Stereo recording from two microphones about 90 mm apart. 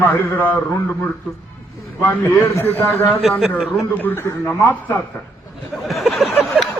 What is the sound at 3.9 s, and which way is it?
Speech, 25° left (ahead or behind).